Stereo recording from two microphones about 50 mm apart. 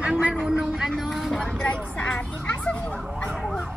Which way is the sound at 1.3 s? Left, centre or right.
Centre.